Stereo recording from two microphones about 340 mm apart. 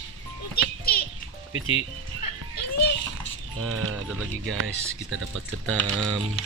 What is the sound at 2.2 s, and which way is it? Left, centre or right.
Music, left.